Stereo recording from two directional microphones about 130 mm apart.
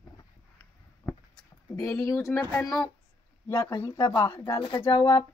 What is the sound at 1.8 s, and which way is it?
Speech, 20° left (ahead or behind).